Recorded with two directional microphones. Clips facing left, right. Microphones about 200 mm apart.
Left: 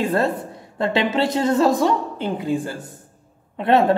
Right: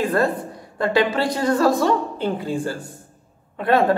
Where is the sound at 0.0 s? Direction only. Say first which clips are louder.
Even; 25° left (ahead or behind).